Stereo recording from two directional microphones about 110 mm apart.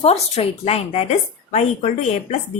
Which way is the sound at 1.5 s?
90° left.